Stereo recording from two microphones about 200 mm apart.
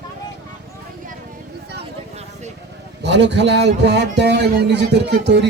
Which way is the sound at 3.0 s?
60° right (ahead or behind).